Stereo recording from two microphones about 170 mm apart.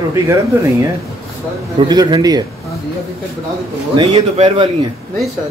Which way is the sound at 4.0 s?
35° right (ahead or behind).